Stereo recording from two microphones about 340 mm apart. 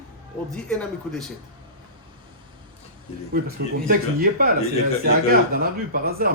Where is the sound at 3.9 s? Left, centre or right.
Right.